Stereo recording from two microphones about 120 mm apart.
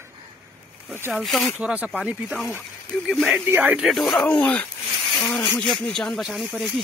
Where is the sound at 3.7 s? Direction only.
Centre (ahead or behind).